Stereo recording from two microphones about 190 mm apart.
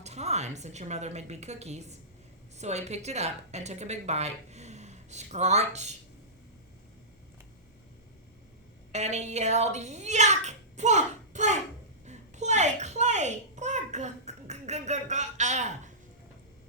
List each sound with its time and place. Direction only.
0.0 s a woman's voice: 35° right (ahead or behind)
8.9 s a woman's voice: 35° right (ahead or behind)
12.0 s babbling: 35° right (ahead or behind)